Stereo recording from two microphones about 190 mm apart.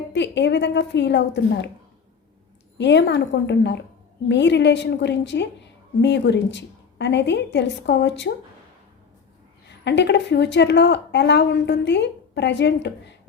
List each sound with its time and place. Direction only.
0.1 s a woman's voice: 65° left (ahead or behind)
2.7 s a woman's voice: 65° left (ahead or behind)
9.8 s a woman's voice: 65° left (ahead or behind)